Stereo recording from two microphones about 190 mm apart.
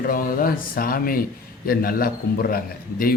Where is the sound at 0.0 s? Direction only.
50° left (ahead or behind).